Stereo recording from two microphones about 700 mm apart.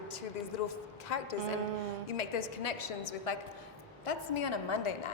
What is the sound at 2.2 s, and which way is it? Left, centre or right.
Speech, left.